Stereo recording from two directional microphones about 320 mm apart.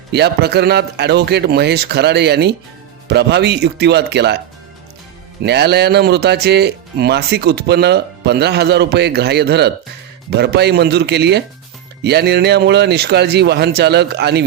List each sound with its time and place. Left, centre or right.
0.1 s speech: right
5.4 s speech: right